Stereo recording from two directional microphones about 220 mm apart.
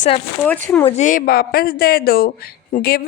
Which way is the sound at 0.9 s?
35° left (ahead or behind).